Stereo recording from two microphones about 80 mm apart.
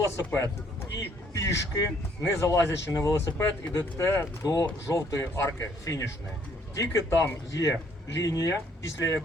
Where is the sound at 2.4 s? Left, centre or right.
Left.